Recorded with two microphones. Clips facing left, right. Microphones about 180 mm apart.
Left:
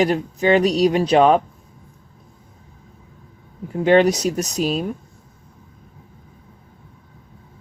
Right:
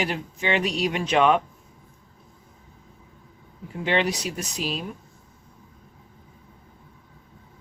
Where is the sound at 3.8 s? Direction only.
45° left (ahead or behind).